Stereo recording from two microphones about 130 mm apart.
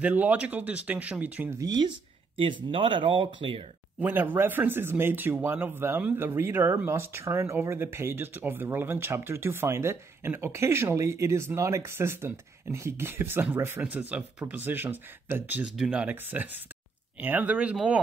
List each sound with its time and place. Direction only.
0.0 s speech: 15° right (ahead or behind)
1.6 s speech: 35° right (ahead or behind)
2.3 s speech: 45° right (ahead or behind)
4.0 s speech: 15° right (ahead or behind)